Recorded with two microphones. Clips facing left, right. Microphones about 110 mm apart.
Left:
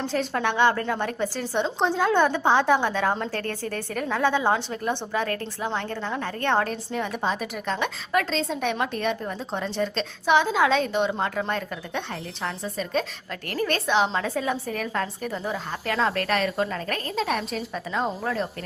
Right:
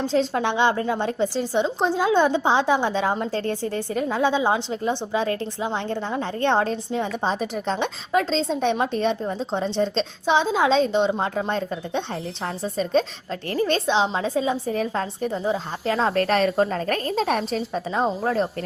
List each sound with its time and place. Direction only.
0.1 s a woman's voice: 20° right (ahead or behind)